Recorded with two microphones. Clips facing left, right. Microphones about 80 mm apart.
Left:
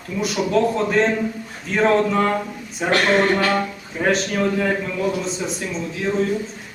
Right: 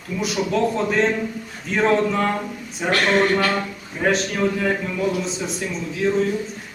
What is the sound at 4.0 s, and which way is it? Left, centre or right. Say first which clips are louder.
A man's voice: left 1 dB; centre.